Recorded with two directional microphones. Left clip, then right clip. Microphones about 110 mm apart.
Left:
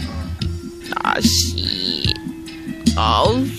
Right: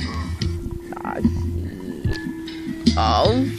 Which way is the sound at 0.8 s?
90° left.